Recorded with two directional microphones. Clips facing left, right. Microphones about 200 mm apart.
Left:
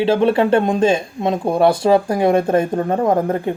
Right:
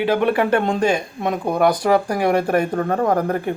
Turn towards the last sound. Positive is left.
turn(degrees=25)  # may be behind; listen again after turning